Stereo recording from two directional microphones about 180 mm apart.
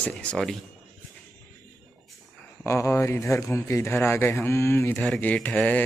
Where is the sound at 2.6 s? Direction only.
15° left (ahead or behind).